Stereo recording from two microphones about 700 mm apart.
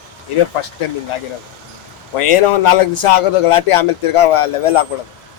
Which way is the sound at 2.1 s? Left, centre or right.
Left.